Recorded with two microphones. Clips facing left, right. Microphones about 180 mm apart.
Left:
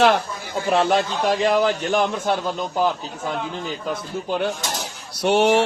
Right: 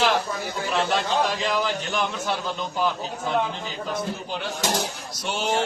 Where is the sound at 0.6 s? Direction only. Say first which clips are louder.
Left 7 dB; 50° left (ahead or behind).